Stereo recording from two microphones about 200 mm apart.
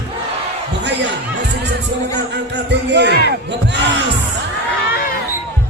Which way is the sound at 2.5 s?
60° right (ahead or behind).